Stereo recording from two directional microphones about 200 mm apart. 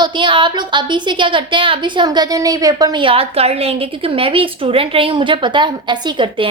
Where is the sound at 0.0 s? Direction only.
25° right (ahead or behind).